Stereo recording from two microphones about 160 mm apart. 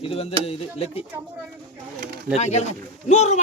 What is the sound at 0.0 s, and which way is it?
Speech, 35° left (ahead or behind).